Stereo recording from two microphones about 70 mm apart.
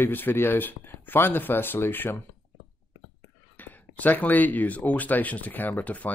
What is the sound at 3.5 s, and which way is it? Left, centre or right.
Speech, left.